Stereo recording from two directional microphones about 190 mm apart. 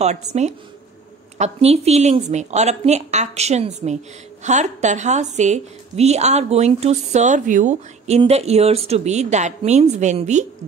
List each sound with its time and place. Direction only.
0.0 s a woman's voice: 35° right (ahead or behind)